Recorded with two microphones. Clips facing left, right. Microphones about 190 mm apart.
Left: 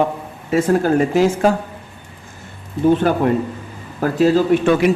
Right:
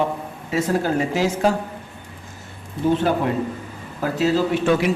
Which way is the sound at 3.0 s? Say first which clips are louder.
Left 4 dB; 50° left (ahead or behind).